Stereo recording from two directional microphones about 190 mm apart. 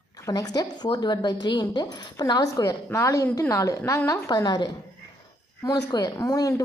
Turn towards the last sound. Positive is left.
turn(degrees=20)  # may be behind; listen again after turning